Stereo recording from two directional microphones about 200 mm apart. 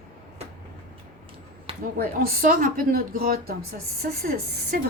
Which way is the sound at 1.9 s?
45° right (ahead or behind).